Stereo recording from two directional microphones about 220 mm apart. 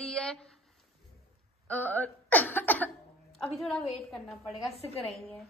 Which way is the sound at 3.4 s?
5° left (ahead or behind).